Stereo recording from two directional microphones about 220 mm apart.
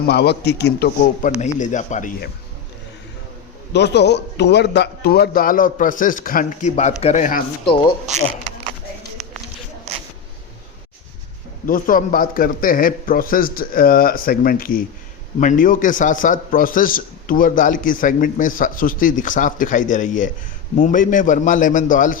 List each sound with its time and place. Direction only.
0.0 s a man's voice: 50° left (ahead or behind)
1.5 s a man's voice: 35° left (ahead or behind)
3.7 s a man's voice: 50° left (ahead or behind); by 7.4 s 35° left (ahead or behind)
7.6 s speech: 25° left (ahead or behind)
11.6 s a man's voice: 40° left (ahead or behind)